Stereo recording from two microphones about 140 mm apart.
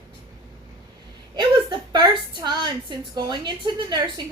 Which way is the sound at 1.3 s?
30° right (ahead or behind).